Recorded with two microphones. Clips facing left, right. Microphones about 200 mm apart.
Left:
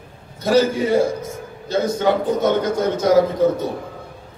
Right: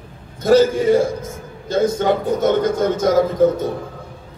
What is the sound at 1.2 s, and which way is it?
A man's voice, 50° right (ahead or behind).